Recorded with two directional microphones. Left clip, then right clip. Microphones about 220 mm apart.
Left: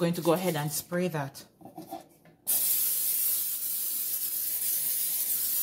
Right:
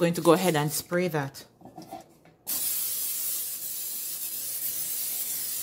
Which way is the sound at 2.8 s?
Centre (ahead or behind).